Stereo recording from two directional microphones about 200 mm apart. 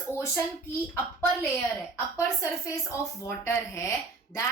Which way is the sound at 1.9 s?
15° left (ahead or behind).